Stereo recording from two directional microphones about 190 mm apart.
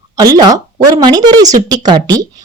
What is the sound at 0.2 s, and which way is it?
Speech, 20° right (ahead or behind).